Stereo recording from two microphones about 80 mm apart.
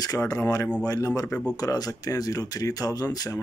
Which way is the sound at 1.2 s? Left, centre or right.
Centre.